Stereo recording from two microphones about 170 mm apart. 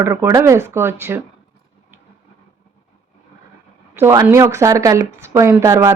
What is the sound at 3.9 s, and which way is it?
Speech, 15° right (ahead or behind).